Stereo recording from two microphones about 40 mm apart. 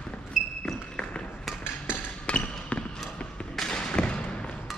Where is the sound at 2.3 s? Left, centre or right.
Left.